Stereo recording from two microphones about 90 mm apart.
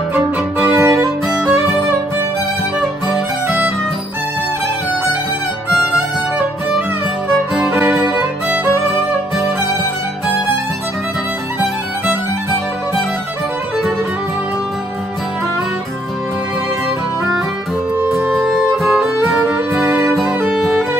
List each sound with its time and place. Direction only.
0.7 s music: 35° right (ahead or behind)
1.3 s music: 5° right (ahead or behind)
3.4 s music: 20° right (ahead or behind)
18.9 s music: 10° right (ahead or behind)